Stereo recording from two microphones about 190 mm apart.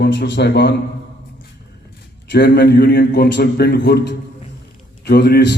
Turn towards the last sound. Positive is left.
turn(degrees=60)  # may be behind; listen again after turning